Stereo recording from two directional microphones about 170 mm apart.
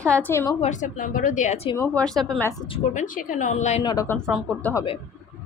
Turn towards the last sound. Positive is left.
turn(degrees=20)  # may be behind; listen again after turning